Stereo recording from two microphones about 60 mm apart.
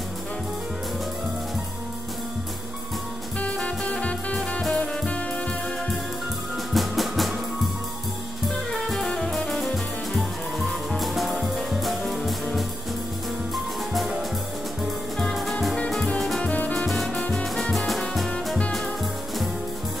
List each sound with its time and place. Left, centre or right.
3.3 s music: left
6.7 s music: centre
8.7 s music: centre
15.1 s music: centre
16.4 s music: left
16.7 s music: centre